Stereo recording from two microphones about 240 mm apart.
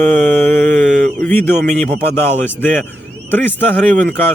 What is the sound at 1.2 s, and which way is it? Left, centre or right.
A man's voice, centre.